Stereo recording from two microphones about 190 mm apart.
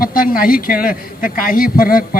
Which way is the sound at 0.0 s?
45° left (ahead or behind).